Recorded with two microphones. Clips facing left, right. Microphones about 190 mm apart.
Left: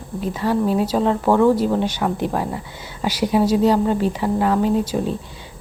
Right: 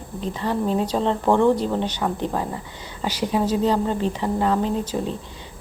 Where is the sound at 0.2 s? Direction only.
5° left (ahead or behind).